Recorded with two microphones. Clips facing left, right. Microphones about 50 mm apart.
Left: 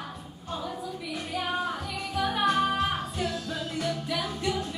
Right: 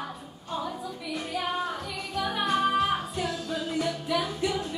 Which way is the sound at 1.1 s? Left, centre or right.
Centre.